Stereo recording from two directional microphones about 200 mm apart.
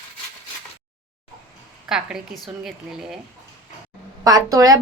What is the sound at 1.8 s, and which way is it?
A woman's voice, 5° right (ahead or behind).